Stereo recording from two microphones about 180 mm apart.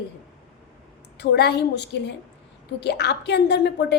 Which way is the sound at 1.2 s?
70° left (ahead or behind).